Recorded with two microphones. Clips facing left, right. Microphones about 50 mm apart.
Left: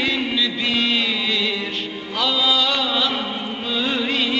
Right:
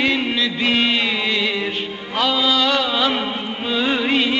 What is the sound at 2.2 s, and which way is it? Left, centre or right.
Music, centre.